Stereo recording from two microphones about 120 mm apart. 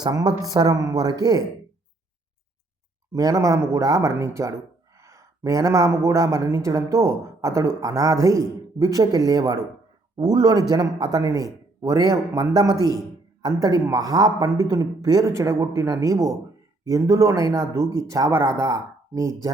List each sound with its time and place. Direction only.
0.0 s a man's voice: 35° right (ahead or behind)
3.1 s a man's voice: 30° right (ahead or behind)